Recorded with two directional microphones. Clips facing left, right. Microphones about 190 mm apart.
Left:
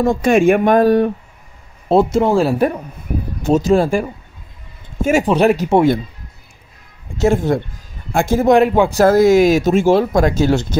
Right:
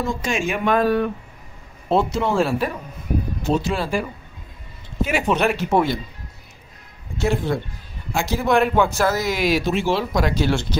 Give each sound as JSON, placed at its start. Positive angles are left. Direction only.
{"t": 0.0, "sound": "speech", "side_deg": 55}
{"t": 7.2, "sound": "speech", "side_deg": 45}